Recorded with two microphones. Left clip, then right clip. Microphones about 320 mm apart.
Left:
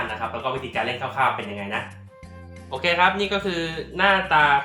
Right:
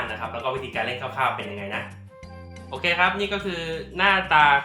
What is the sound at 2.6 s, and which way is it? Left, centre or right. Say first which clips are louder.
Speech: left 2 dB; centre.